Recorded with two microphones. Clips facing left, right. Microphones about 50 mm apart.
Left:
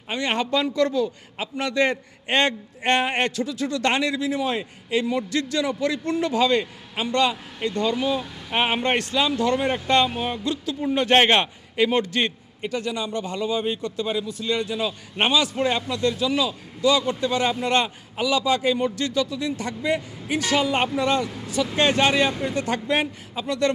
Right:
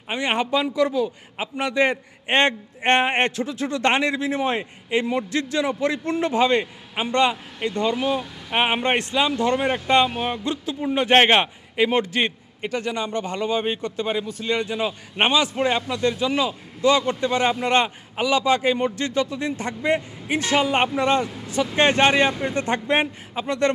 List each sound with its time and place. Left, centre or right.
0.1 s a man's voice: right
8.2 s a man's voice: centre
12.6 s a man's voice: right
21.4 s vehicle: right
21.8 s a man's voice: right